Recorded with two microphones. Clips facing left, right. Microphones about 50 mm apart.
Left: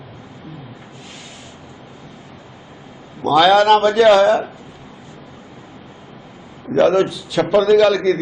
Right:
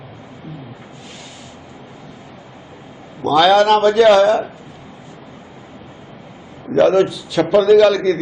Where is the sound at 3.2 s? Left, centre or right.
Centre.